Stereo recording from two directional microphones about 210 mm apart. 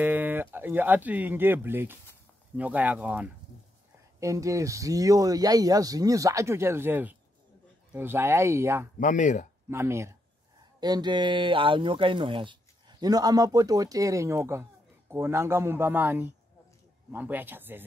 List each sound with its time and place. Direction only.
0.0 s speech: 10° right (ahead or behind)
9.0 s speech: 35° left (ahead or behind)
9.7 s speech: 10° right (ahead or behind)